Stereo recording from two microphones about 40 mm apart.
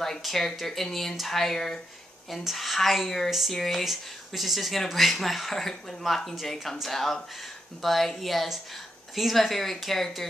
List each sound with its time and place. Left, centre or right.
0.0 s speech: centre
3.5 s speech: centre
3.8 s speech: centre